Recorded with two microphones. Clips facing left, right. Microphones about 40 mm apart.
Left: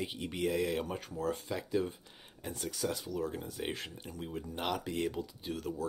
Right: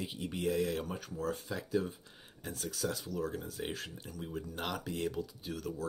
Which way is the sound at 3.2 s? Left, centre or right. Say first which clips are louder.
Even; left.